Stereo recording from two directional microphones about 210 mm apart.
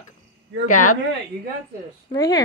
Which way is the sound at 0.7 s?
40° left (ahead or behind).